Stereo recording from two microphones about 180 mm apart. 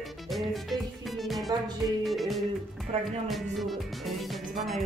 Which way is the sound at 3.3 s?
Centre (ahead or behind).